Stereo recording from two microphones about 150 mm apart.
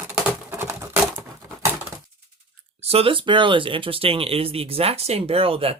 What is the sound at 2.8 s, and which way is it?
Speech, 40° right (ahead or behind).